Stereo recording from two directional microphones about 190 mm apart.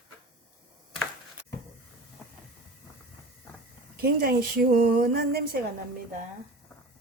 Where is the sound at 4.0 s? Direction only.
55° right (ahead or behind).